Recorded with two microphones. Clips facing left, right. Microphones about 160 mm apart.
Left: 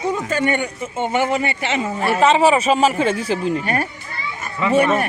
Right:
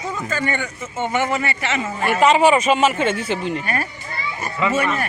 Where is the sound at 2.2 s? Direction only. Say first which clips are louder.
Even; 30° left (ahead or behind).